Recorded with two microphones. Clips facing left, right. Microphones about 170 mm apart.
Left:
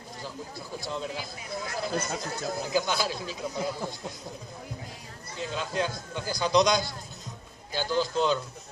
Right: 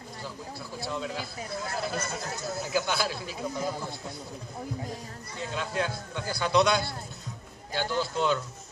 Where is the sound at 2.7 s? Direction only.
15° left (ahead or behind).